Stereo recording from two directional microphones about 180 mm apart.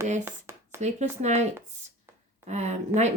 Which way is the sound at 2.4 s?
40° right (ahead or behind).